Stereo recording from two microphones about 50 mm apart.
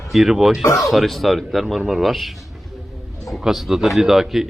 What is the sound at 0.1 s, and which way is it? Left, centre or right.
A man's voice, centre.